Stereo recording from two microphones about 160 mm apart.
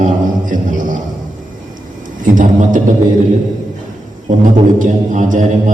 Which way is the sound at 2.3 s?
55° right (ahead or behind).